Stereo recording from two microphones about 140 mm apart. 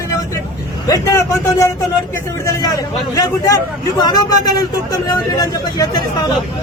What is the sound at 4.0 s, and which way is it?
Speech, 30° left (ahead or behind).